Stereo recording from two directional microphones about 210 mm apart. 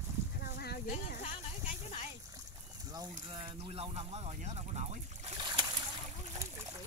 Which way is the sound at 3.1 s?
25° right (ahead or behind).